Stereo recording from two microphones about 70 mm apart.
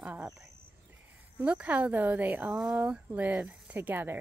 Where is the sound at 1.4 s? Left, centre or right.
Right.